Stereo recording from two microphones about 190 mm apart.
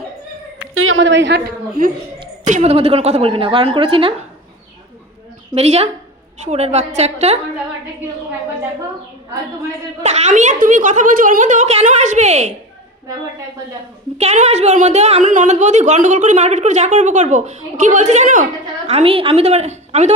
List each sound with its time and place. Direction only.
0.7 s speech: 90° right; by 2.2 s 60° right (ahead or behind)
2.4 s a woman's voice: 40° right (ahead or behind)
5.5 s a woman's voice: 35° right (ahead or behind)
10.0 s a woman's voice: 40° right (ahead or behind)
14.2 s a woman's voice: 35° right (ahead or behind)